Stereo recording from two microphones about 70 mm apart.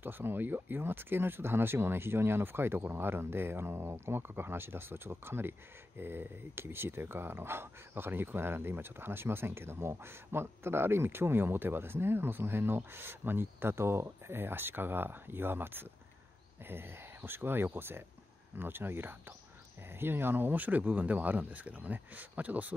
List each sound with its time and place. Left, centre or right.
0.0 s speech: right